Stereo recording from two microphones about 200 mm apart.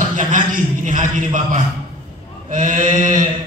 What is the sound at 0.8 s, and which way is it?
Speech, 40° right (ahead or behind).